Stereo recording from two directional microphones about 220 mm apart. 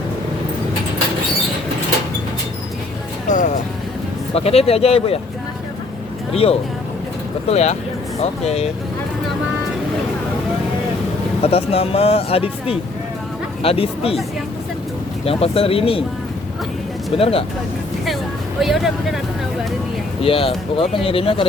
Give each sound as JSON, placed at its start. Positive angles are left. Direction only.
{"t": 3.2, "sound": "music", "side_deg": 35}
{"t": 4.4, "sound": "speech", "side_deg": 25}
{"t": 6.3, "sound": "speech", "side_deg": 25}
{"t": 11.4, "sound": "speech", "side_deg": 25}
{"t": 15.2, "sound": "speech", "side_deg": 25}
{"t": 17.2, "sound": "speech", "side_deg": 25}
{"t": 18.6, "sound": "speech", "side_deg": 0}
{"t": 20.2, "sound": "speech", "side_deg": 25}